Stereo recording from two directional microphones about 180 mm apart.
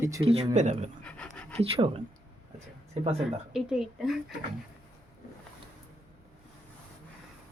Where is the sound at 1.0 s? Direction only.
5° left (ahead or behind).